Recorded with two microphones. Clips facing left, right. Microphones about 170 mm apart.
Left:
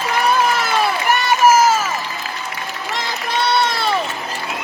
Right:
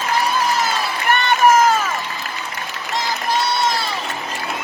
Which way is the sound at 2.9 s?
60° left (ahead or behind).